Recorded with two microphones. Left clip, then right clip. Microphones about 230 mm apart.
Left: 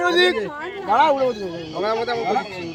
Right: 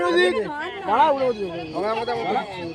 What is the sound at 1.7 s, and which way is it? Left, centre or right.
Speech, left.